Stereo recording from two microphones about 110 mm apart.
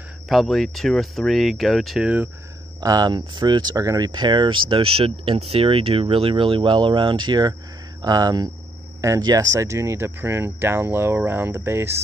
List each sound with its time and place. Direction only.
0.3 s speech: centre (ahead or behind)
2.8 s speech: 35° right (ahead or behind); by 11.9 s 20° right (ahead or behind)